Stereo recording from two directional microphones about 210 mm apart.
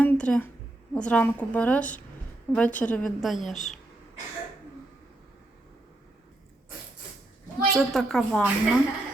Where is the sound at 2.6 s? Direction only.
35° left (ahead or behind).